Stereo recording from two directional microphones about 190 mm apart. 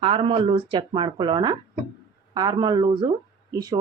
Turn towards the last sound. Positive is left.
turn(degrees=-20)  # may be behind; listen again after turning